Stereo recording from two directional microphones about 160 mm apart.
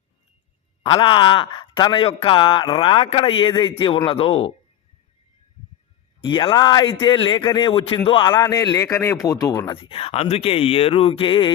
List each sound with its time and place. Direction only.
0.8 s a man's voice: 30° left (ahead or behind)
6.2 s a man's voice: 30° left (ahead or behind)